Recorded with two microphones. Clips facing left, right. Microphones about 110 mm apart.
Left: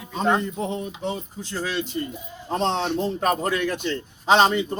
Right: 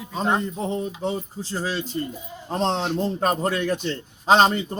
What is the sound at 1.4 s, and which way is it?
A man's voice, 35° right (ahead or behind).